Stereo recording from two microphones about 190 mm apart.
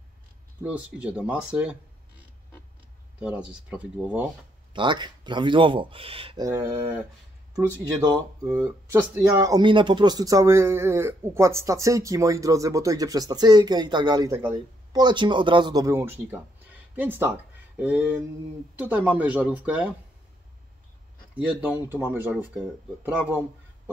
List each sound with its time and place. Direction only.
0.6 s speech: 5° right (ahead or behind)
3.2 s speech: 5° right (ahead or behind)
4.7 s speech: 25° right (ahead or behind); by 7.1 s 5° right (ahead or behind)
7.5 s speech: 20° right (ahead or behind)
21.5 s speech: 10° right (ahead or behind)